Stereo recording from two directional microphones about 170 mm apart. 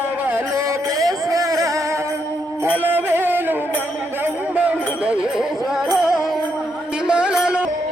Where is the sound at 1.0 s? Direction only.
20° right (ahead or behind).